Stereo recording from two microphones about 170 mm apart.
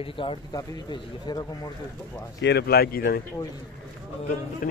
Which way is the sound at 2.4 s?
70° left (ahead or behind).